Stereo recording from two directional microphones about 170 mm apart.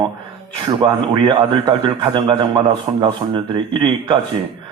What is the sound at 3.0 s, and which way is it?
Speech, 30° right (ahead or behind).